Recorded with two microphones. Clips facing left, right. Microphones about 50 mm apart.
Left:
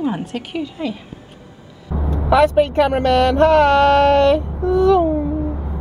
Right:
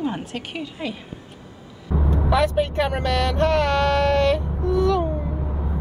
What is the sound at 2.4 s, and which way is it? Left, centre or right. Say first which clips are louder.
Speech: left 10 dB; left.